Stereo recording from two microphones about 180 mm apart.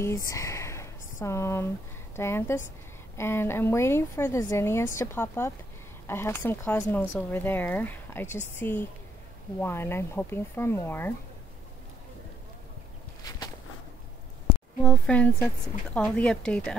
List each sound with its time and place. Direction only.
0.0 s speech: 15° left (ahead or behind)
13.2 s walk: 20° left (ahead or behind)
14.8 s speech: 5° left (ahead or behind)